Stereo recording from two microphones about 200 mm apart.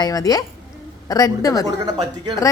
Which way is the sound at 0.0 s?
20° left (ahead or behind).